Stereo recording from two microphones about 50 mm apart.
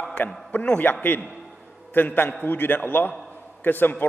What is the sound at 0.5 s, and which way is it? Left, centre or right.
Speech, left.